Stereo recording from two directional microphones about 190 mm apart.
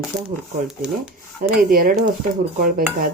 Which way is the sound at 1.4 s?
50° right (ahead or behind).